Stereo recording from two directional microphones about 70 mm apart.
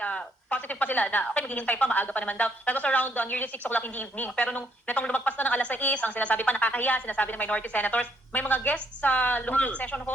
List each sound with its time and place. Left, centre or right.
0.0 s speech: centre